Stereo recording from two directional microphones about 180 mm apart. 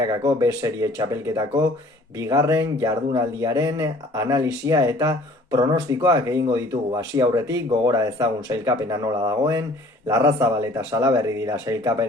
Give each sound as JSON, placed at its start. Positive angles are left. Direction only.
{"t": 0.0, "sound": "speech", "side_deg": -20}